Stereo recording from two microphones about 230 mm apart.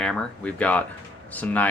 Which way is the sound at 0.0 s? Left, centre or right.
Centre.